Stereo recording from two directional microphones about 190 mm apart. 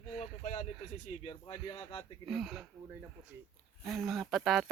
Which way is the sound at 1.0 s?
30° left (ahead or behind).